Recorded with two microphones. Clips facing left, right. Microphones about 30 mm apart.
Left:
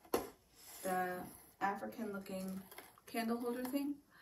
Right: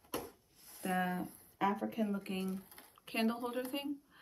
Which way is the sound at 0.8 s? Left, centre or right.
Right.